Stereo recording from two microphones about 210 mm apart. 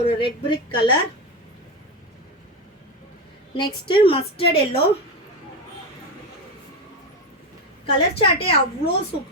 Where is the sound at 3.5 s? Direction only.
25° left (ahead or behind).